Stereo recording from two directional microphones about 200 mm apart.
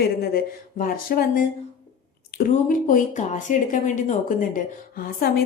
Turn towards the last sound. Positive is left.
turn(degrees=45)  # may be behind; listen again after turning